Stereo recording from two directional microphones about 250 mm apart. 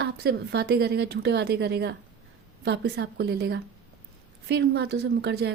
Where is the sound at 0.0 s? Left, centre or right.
Right.